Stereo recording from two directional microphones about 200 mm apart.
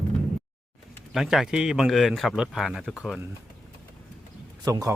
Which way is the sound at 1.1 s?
Centre (ahead or behind).